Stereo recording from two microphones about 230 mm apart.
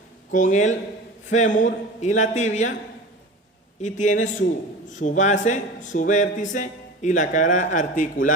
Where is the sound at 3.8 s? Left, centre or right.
Left.